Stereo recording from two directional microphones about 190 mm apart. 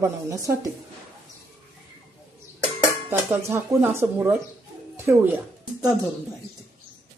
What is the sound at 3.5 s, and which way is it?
A woman's voice, 10° right (ahead or behind).